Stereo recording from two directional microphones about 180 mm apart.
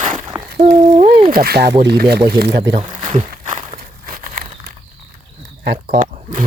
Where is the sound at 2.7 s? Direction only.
35° right (ahead or behind).